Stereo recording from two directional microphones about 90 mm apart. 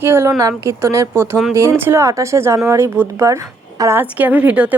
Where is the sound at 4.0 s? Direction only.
20° right (ahead or behind).